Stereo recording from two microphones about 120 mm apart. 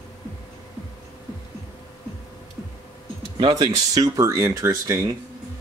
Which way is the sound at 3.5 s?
30° right (ahead or behind).